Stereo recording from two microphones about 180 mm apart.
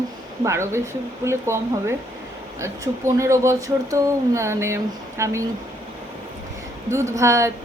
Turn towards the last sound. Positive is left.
turn(degrees=-15)  # may be behind; listen again after turning